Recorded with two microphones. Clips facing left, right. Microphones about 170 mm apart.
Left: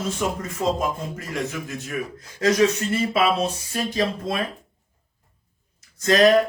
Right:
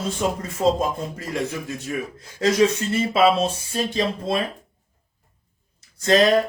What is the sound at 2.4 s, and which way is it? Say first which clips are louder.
A man's voice: even; 30° right (ahead or behind).